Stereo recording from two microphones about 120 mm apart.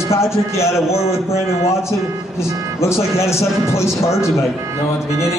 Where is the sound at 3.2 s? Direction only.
25° left (ahead or behind).